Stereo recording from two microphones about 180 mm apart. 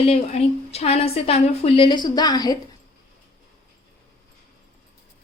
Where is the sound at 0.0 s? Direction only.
35° left (ahead or behind).